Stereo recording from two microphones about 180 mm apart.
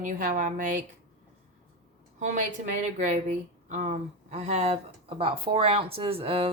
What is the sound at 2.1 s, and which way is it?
A woman's voice, 45° right (ahead or behind).